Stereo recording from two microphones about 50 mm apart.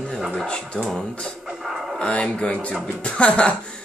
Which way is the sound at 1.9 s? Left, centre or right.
Centre.